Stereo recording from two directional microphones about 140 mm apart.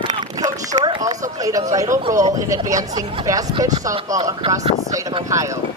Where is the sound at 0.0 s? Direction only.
30° right (ahead or behind).